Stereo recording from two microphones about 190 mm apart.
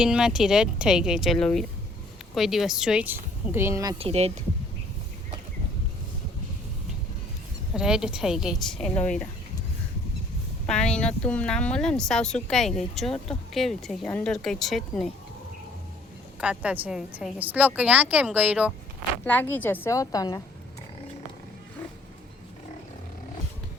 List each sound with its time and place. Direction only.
0.0 s speech: 5° right (ahead or behind)
3.9 s speech: 30° right (ahead or behind)
7.7 s speech: 5° right (ahead or behind)
10.7 s speech: 5° left (ahead or behind)
16.4 s a woman's voice: 5° right (ahead or behind)
19.2 s a woman's voice: 10° left (ahead or behind)